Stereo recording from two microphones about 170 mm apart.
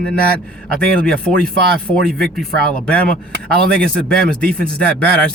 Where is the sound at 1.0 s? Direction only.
5° left (ahead or behind).